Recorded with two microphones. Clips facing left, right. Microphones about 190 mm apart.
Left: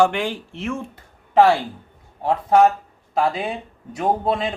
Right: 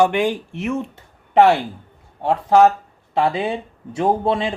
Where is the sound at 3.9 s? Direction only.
25° right (ahead or behind).